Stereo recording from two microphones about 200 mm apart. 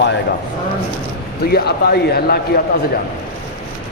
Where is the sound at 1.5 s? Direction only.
55° left (ahead or behind).